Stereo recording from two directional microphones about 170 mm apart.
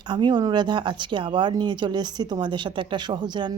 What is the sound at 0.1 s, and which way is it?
Speech, 25° right (ahead or behind).